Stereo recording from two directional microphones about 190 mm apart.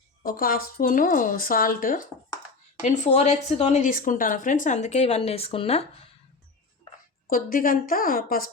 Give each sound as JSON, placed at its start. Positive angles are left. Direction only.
{"t": 0.2, "sound": "a woman's voice", "side_deg": 50}
{"t": 7.3, "sound": "a woman's voice", "side_deg": 45}